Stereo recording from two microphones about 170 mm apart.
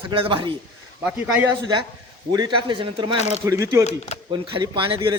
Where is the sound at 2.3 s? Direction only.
25° right (ahead or behind).